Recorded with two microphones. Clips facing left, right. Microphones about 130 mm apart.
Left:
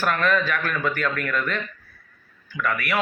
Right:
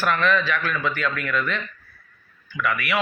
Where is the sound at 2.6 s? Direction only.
45° left (ahead or behind).